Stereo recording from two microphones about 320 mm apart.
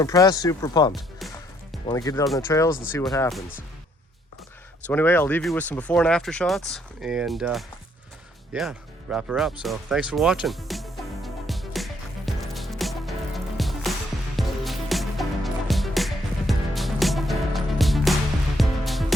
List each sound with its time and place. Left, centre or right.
0.0 s speech: centre
4.9 s speech: centre
9.6 s music: centre